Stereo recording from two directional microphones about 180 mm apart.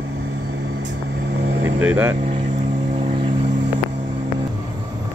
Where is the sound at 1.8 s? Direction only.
10° right (ahead or behind).